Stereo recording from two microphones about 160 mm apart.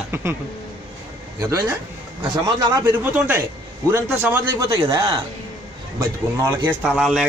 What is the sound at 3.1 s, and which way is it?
Speech, 15° right (ahead or behind).